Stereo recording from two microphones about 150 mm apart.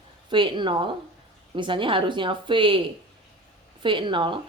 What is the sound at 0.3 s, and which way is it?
Speech, 30° right (ahead or behind).